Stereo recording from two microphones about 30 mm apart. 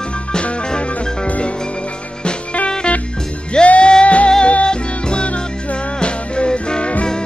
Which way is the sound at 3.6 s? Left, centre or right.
Left.